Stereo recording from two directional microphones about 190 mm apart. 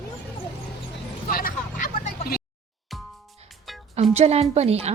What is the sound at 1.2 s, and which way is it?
Vehicle, 45° left (ahead or behind).